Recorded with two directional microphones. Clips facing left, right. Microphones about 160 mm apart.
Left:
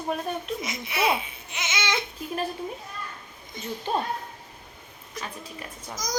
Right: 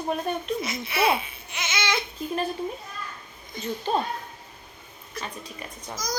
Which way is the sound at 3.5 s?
20° left (ahead or behind).